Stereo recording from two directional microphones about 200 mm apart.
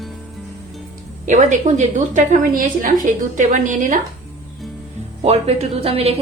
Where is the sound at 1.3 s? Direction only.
35° right (ahead or behind).